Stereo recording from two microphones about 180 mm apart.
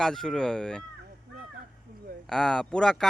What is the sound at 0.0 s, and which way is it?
Speech, centre (ahead or behind).